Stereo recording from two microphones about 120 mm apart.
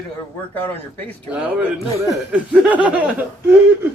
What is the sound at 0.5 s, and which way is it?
Speech, 15° left (ahead or behind).